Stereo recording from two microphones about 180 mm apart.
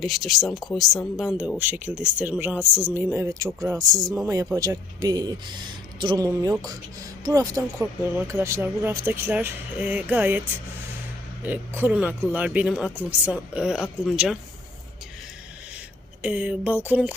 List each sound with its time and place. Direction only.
0.0 s speech: centre (ahead or behind); by 3.5 s 15° right (ahead or behind)
3.8 s speech: centre (ahead or behind)
4.5 s speech: 20° right (ahead or behind)
11.4 s speech: 10° right (ahead or behind)
16.2 s speech: 10° right (ahead or behind)